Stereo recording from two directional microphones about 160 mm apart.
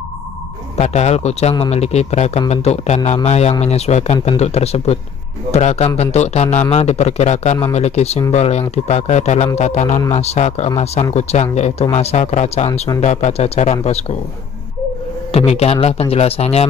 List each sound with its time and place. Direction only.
0.7 s a man's voice: 45° left (ahead or behind)
15.3 s a man's voice: 40° left (ahead or behind)